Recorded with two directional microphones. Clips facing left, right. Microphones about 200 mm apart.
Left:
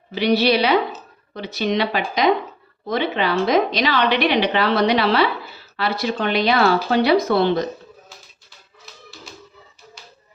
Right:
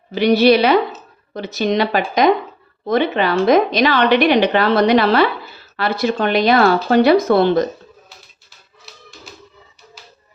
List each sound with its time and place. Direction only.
0.1 s a woman's voice: 50° right (ahead or behind)